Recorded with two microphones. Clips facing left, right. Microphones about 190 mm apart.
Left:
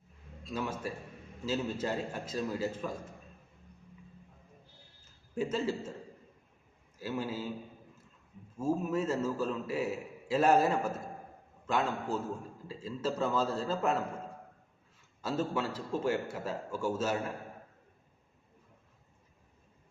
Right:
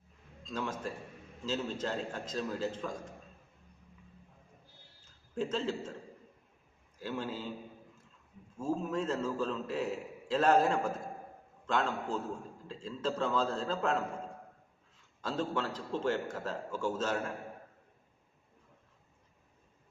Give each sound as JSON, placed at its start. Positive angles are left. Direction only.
{"t": 0.4, "sound": "a man's voice", "side_deg": 10}
{"t": 5.3, "sound": "a man's voice", "side_deg": 10}
{"t": 7.0, "sound": "a man's voice", "side_deg": 5}
{"t": 8.5, "sound": "a man's voice", "side_deg": 10}
{"t": 15.2, "sound": "a man's voice", "side_deg": 10}